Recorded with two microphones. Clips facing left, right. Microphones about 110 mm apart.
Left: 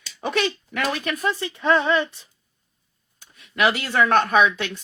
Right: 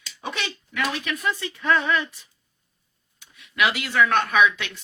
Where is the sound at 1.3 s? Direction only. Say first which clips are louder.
Left 2 dB; 25° left (ahead or behind).